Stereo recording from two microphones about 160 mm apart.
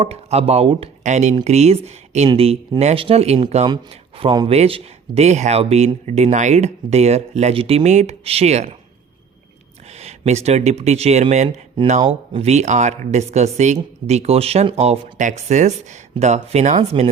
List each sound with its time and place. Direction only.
0.0 s speech: 40° right (ahead or behind)
1.0 s speech: 50° right (ahead or behind)
9.9 s speech: 45° right (ahead or behind)